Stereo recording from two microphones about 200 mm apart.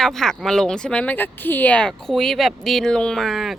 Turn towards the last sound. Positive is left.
turn(degrees=0)  # may be behind; listen again after turning